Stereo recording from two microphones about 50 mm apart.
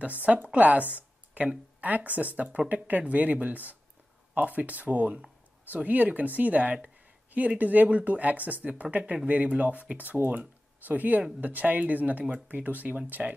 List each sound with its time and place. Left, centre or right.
0.0 s a woman's voice: right